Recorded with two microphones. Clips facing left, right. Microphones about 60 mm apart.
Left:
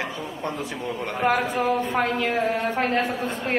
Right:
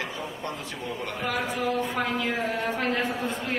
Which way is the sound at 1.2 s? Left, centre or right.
Left.